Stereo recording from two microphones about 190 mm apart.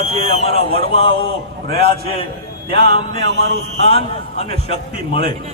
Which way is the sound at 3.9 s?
30° left (ahead or behind).